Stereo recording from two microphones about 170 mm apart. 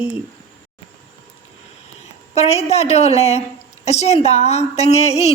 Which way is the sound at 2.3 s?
40° left (ahead or behind).